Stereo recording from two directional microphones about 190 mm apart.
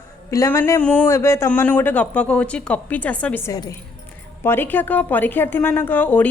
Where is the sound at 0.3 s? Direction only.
15° left (ahead or behind).